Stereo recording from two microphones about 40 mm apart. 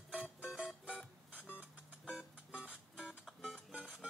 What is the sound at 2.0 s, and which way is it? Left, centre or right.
Music, right.